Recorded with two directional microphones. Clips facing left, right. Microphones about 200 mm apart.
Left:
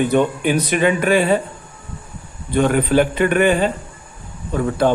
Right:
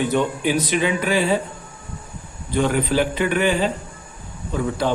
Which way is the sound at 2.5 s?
55° left (ahead or behind).